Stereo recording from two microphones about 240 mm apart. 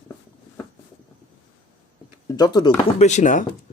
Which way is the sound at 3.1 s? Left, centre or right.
Left.